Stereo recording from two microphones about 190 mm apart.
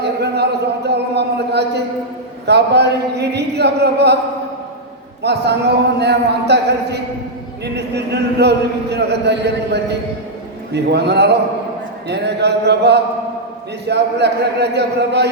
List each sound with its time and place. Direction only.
0.0 s a sound: 60° right (ahead or behind)
2.5 s speech: 60° right (ahead or behind)
5.2 s speech: 60° right (ahead or behind)